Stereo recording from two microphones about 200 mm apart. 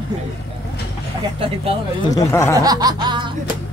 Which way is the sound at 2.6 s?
20° right (ahead or behind).